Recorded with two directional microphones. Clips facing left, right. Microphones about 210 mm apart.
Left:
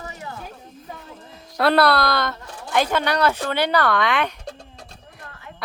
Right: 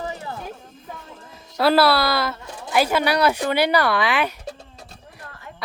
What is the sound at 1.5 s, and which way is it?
A woman's voice, 5° right (ahead or behind).